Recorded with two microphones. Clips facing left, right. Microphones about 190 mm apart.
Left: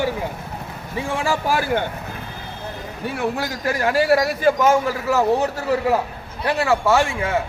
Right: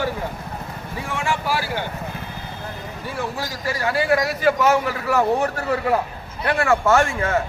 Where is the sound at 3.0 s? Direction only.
60° left (ahead or behind).